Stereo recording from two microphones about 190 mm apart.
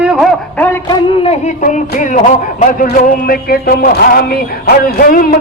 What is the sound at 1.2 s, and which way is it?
A man's voice, 40° left (ahead or behind).